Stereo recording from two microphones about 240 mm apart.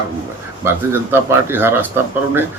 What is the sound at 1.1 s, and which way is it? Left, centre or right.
Speech, centre.